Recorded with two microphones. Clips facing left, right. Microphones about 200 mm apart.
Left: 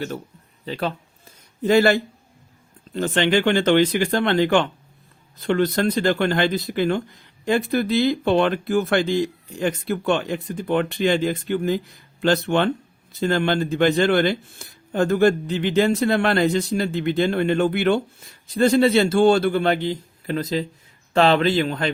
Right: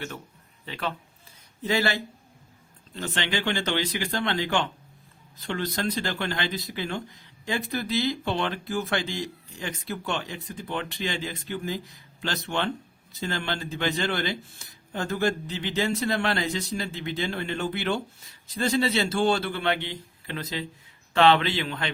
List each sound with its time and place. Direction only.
0.6 s speech: 35° left (ahead or behind)
1.6 s a man's voice: 50° left (ahead or behind)